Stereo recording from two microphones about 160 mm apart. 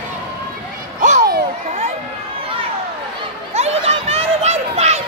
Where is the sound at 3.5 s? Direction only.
40° right (ahead or behind).